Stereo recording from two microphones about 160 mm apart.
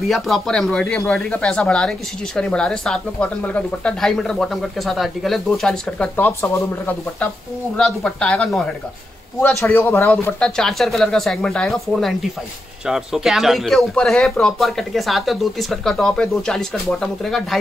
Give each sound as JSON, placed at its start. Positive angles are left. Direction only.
{"t": 0.0, "sound": "speech", "side_deg": 0}
{"t": 9.6, "sound": "a man's voice", "side_deg": 15}
{"t": 10.4, "sound": "speech", "side_deg": 5}